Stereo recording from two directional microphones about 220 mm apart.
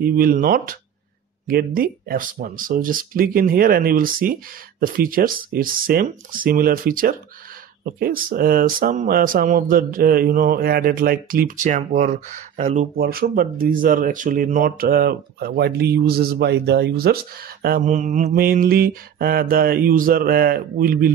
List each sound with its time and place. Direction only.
0.0 s speech: 40° right (ahead or behind)
12.9 s speech: 45° right (ahead or behind)